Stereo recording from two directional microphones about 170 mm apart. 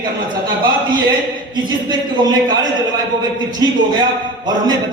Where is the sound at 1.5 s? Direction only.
25° right (ahead or behind).